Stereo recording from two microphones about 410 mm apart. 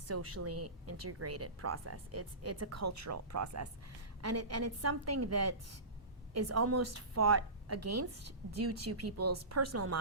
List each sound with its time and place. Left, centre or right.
0.1 s a woman's voice: right